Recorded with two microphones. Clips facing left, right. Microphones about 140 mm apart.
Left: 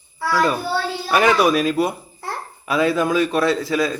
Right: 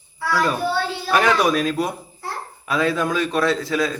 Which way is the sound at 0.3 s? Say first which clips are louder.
Left 1 dB; 5° left (ahead or behind).